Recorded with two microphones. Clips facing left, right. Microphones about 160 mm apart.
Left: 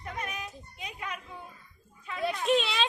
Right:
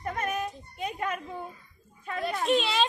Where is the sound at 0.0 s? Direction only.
50° right (ahead or behind).